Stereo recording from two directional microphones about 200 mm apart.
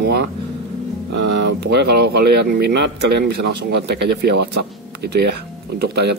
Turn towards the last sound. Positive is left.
turn(degrees=-55)  # may be behind; listen again after turning